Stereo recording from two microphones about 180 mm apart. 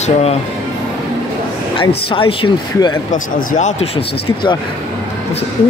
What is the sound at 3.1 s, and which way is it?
Speech, 45° left (ahead or behind).